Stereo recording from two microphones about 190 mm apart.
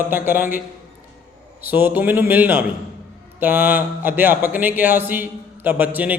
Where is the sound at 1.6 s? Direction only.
10° right (ahead or behind).